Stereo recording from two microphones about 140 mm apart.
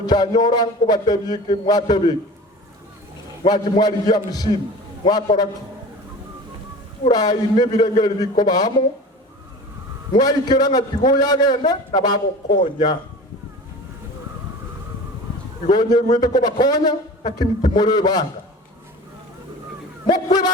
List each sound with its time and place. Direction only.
0.0 s speech: 30° left (ahead or behind)
3.4 s speech: 30° left (ahead or behind)
7.1 s speech: 30° left (ahead or behind)
10.1 s speech: 30° left (ahead or behind)
15.7 s speech: 30° left (ahead or behind)
20.1 s speech: 30° left (ahead or behind)